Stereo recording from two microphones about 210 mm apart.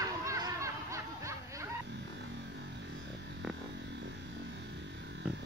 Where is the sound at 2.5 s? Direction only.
55° right (ahead or behind).